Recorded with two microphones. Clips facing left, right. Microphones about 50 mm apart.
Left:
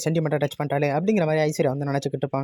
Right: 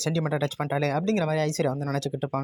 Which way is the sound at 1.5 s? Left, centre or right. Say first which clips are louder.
Left 4 dB; left.